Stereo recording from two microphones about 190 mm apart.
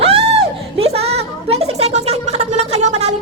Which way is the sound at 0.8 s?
35° right (ahead or behind).